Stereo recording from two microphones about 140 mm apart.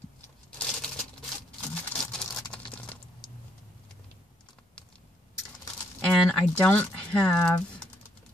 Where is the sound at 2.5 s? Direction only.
10° left (ahead or behind).